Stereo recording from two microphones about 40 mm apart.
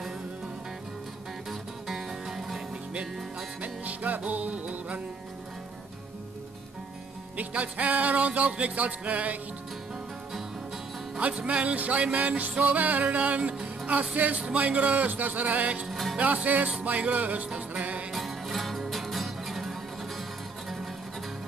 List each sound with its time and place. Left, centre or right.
1.5 s music: centre
3.6 s music: right
7.3 s music: right
11.1 s music: right
14.1 s speech: right
14.4 s music: right
15.9 s music: centre
16.2 s music: right
18.1 s music: centre